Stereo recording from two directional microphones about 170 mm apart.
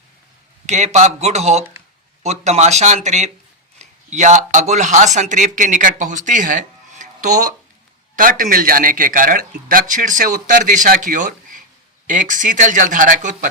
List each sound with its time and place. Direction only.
0.7 s speech: 45° right (ahead or behind)
7.0 s a sound: 45° right (ahead or behind)
8.1 s speech: 50° right (ahead or behind)